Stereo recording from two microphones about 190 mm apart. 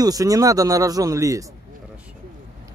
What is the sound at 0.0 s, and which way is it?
Speech, 20° right (ahead or behind).